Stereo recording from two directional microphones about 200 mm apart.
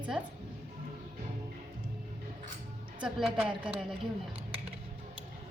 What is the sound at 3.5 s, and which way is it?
Speech, 25° right (ahead or behind).